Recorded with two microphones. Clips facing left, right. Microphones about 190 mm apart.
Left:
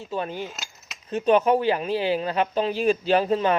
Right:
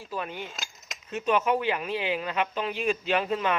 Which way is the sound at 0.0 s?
30° left (ahead or behind).